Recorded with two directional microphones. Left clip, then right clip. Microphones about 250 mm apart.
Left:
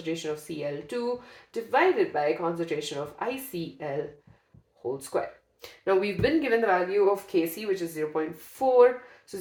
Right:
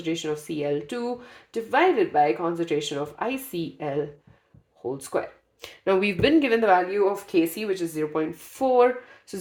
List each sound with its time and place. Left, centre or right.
0.0 s speech: right
5.1 s speech: right